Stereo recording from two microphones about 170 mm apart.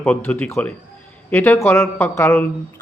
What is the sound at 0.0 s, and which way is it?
Speech, 10° left (ahead or behind).